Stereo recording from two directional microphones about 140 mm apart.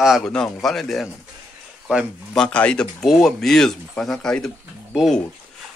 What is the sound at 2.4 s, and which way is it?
Speech, 10° left (ahead or behind).